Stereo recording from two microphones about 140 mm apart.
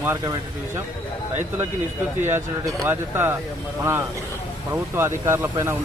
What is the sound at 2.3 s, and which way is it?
A man's voice, 20° right (ahead or behind).